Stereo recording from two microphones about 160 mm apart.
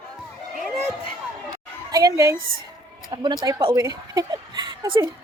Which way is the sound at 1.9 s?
20° right (ahead or behind).